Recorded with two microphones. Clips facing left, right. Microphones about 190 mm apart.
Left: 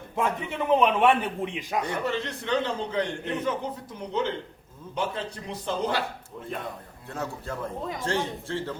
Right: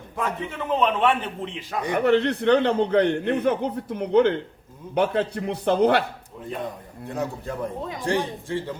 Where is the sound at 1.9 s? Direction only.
60° right (ahead or behind).